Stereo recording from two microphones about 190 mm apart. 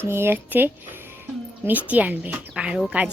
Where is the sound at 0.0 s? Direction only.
10° right (ahead or behind).